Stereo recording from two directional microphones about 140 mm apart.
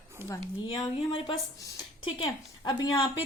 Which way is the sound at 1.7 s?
35° left (ahead or behind).